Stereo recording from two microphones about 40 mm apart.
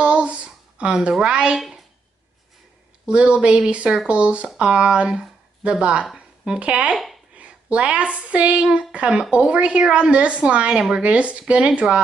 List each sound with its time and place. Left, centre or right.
0.0 s a sound: right
0.7 s speech: right
3.1 s a woman's voice: right